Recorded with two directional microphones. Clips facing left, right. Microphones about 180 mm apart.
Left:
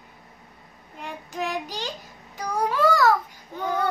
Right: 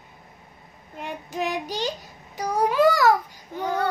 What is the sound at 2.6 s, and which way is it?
Babbling, 15° right (ahead or behind).